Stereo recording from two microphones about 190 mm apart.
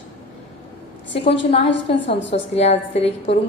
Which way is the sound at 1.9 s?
30° left (ahead or behind).